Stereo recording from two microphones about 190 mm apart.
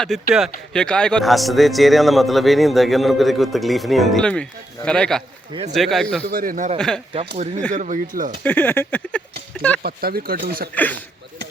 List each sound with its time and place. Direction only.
0.0 s speech: centre (ahead or behind)
6.2 s speech: 50° right (ahead or behind)
6.7 s speech: 5° left (ahead or behind)
7.7 s speech: 40° right (ahead or behind)
8.4 s speech: 10° left (ahead or behind)
9.8 s speech: 55° right (ahead or behind)
10.8 s speech: 10° left (ahead or behind)